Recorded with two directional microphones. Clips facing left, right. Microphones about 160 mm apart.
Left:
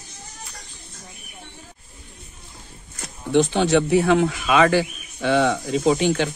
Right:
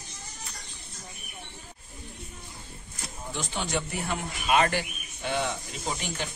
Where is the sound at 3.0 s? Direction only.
75° left (ahead or behind); by 6.3 s 90° left.